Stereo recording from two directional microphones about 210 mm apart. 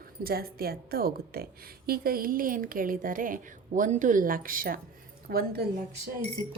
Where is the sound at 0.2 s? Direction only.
45° right (ahead or behind).